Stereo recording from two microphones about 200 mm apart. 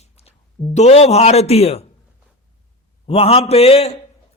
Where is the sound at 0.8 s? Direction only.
35° left (ahead or behind).